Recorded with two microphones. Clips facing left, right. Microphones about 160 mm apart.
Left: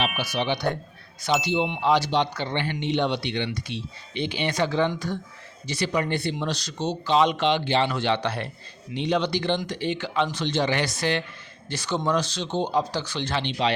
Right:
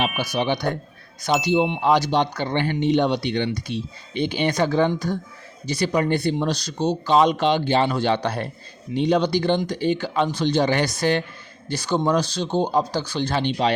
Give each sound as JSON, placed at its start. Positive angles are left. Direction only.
{"t": 0.3, "sound": "speech", "side_deg": -45}